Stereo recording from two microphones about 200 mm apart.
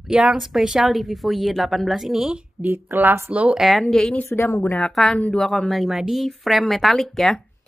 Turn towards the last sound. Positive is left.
turn(degrees=0)  # may be behind; listen again after turning